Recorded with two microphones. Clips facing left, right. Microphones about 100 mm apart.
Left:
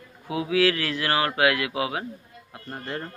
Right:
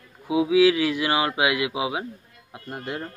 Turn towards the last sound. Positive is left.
turn(degrees=-10)  # may be behind; listen again after turning